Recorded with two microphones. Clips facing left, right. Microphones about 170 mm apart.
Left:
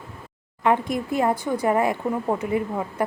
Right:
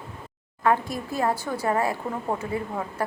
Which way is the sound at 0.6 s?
20° left (ahead or behind).